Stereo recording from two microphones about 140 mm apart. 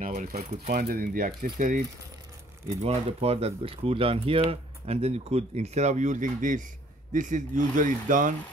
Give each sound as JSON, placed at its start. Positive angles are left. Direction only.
{"t": 0.0, "sound": "speech", "side_deg": -70}
{"t": 0.7, "sound": "speech", "side_deg": -90}
{"t": 2.7, "sound": "speech", "side_deg": -50}